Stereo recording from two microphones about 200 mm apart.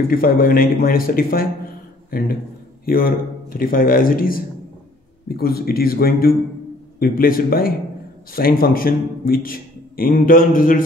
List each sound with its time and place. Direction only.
0.1 s a man's voice: 45° left (ahead or behind)